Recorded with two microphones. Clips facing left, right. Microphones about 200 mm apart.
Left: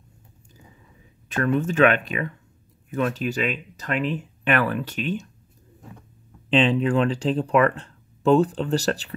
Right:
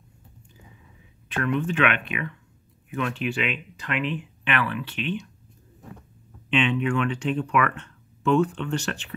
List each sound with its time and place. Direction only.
1.3 s speech: 40° left (ahead or behind)
6.5 s speech: 35° left (ahead or behind)